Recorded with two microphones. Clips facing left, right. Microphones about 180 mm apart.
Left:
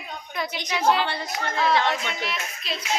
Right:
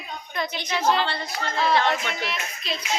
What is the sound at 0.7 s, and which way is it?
Speech, 10° left (ahead or behind).